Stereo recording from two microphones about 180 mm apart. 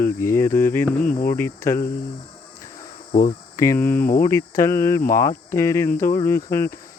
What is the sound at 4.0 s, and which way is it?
Speech, 55° left (ahead or behind).